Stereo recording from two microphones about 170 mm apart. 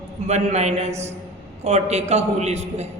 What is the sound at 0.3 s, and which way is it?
A woman's voice, 40° right (ahead or behind).